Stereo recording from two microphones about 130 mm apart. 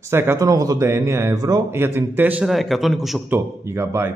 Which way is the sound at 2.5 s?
Centre (ahead or behind).